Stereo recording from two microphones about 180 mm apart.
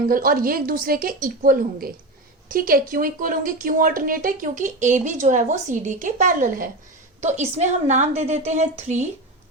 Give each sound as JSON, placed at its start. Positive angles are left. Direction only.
{"t": 0.1, "sound": "a woman's voice", "side_deg": -50}